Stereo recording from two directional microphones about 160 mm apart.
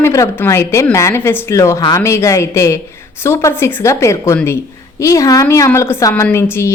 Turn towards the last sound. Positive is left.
turn(degrees=15)  # may be behind; listen again after turning